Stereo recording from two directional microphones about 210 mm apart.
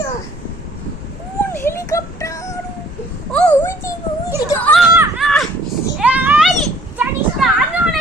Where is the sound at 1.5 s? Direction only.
10° left (ahead or behind); by 7.4 s 5° right (ahead or behind).